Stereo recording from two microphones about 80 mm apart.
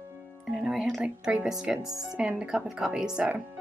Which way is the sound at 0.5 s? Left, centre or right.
Centre.